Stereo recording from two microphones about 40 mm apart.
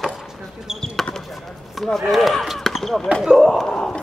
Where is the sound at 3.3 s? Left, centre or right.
Centre.